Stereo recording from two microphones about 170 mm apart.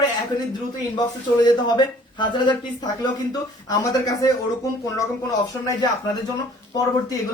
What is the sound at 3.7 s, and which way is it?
Speech, 20° left (ahead or behind).